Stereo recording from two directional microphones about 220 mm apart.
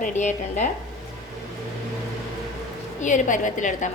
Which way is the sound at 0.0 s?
30° left (ahead or behind).